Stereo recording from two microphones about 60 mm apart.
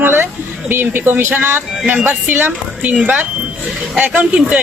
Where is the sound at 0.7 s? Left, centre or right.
Right.